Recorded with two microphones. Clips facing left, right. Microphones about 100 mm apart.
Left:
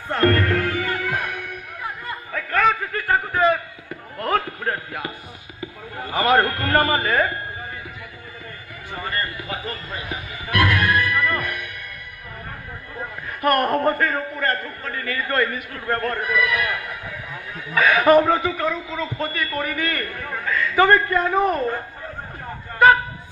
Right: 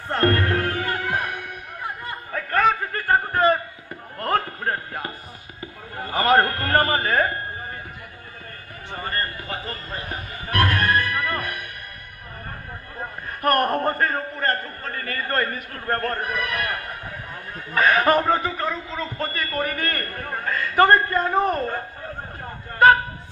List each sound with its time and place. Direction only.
0.2 s music: 30° right (ahead or behind)
2.3 s a sound: 35° right (ahead or behind)
9.0 s music: 40° right (ahead or behind)
13.4 s a man's voice: 40° right (ahead or behind)
18.7 s a man's voice: 5° left (ahead or behind)
19.1 s a man's voice: 45° right (ahead or behind)